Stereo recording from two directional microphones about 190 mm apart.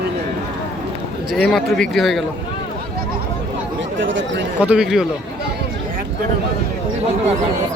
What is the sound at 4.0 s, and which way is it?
Speech, 80° right.